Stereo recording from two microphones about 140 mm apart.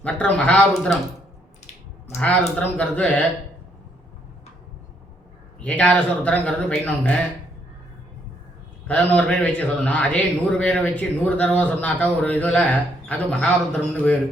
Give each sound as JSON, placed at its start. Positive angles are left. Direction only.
{"t": 0.0, "sound": "a man's voice", "side_deg": 10}
{"t": 2.0, "sound": "a man's voice", "side_deg": 5}
{"t": 5.5, "sound": "a man's voice", "side_deg": 10}
{"t": 8.9, "sound": "a man's voice", "side_deg": 10}